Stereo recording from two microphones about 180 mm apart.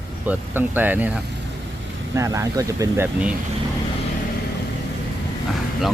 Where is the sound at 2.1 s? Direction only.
15° right (ahead or behind).